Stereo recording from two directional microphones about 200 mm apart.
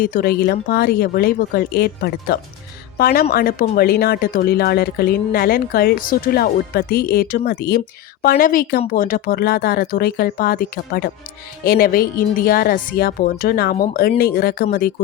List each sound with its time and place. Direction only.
0.0 s speech: 45° left (ahead or behind)